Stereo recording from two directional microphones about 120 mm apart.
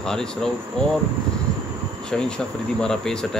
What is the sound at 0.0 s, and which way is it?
Speech, 5° left (ahead or behind).